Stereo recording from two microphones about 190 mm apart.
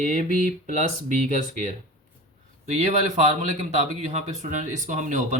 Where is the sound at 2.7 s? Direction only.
35° right (ahead or behind).